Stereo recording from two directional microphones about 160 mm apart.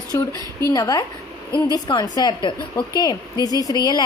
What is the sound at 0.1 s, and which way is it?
A woman's voice, 20° left (ahead or behind).